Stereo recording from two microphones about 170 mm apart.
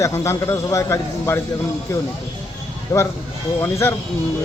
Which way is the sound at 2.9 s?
20° left (ahead or behind).